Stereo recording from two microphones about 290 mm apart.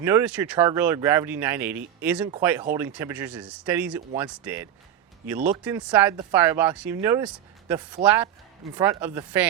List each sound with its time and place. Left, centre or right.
0.0 s speech: centre